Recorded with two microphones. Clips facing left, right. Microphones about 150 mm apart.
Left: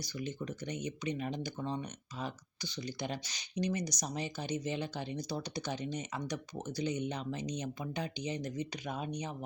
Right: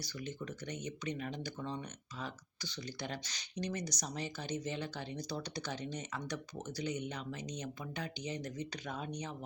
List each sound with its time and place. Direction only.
0.0 s speech: 20° left (ahead or behind)